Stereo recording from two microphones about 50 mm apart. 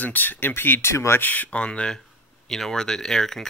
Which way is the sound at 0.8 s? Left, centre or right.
Left.